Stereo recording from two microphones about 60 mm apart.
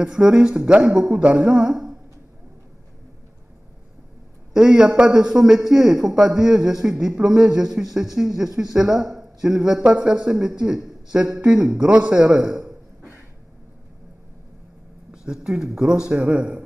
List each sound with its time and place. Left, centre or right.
0.0 s a man's voice: centre
4.6 s a man's voice: centre
15.0 s speech: centre
16.1 s a man's voice: right